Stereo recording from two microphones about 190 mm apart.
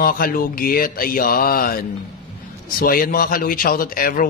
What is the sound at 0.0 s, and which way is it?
Speech, 50° left (ahead or behind).